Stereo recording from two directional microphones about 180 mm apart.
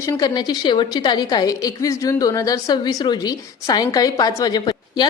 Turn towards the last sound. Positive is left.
turn(degrees=25)  # may be behind; listen again after turning